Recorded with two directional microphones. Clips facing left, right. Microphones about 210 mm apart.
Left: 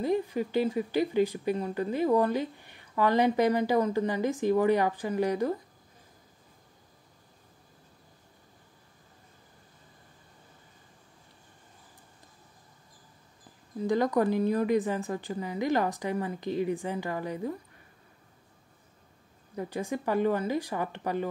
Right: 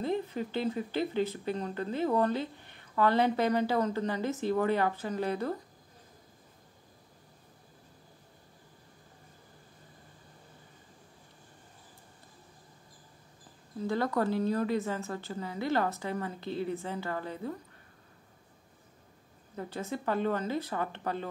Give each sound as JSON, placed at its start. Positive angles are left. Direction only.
{"t": 0.0, "sound": "speech", "side_deg": 15}
{"t": 13.7, "sound": "speech", "side_deg": 15}
{"t": 19.5, "sound": "speech", "side_deg": 15}